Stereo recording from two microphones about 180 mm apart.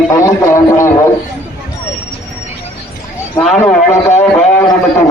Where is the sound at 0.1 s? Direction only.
15° left (ahead or behind).